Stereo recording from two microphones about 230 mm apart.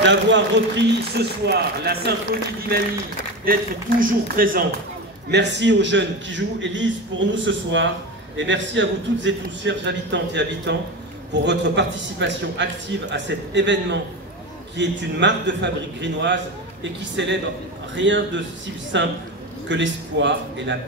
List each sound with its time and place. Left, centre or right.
0.0 s a man's voice: right
4.0 s speech: right
5.3 s a man's voice: right